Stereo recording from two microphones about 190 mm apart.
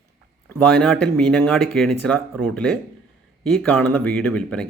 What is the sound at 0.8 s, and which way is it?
A man's voice, 5° left (ahead or behind).